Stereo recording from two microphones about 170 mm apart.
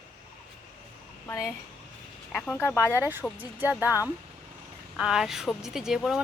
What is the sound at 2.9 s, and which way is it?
Speech, 10° right (ahead or behind).